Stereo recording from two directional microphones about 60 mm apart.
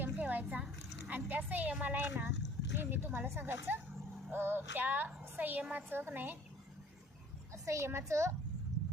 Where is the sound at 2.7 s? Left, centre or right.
Right.